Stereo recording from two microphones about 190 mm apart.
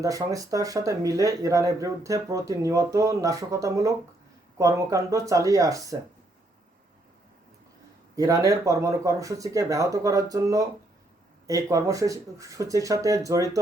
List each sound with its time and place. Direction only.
0.0 s speech: 15° right (ahead or behind)
8.1 s speech: 15° right (ahead or behind)